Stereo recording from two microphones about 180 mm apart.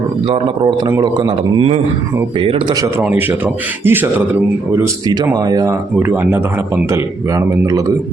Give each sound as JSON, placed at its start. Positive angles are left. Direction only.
{"t": 0.9, "sound": "speech", "side_deg": -15}
{"t": 3.0, "sound": "a man's voice", "side_deg": -10}